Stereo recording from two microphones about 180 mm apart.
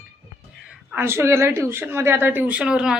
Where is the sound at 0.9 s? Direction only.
10° right (ahead or behind).